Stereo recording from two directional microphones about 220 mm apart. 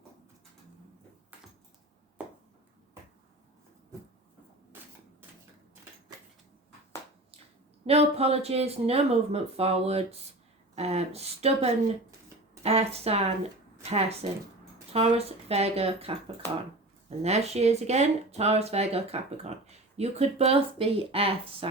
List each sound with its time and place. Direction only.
2.2 s a sound: 5° right (ahead or behind)
7.9 s speech: 25° right (ahead or behind)
17.2 s speech: 30° right (ahead or behind)